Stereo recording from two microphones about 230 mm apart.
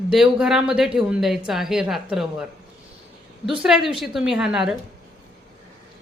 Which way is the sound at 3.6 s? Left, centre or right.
Centre.